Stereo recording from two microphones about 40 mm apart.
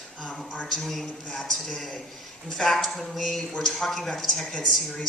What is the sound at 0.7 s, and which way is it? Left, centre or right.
Speech, centre.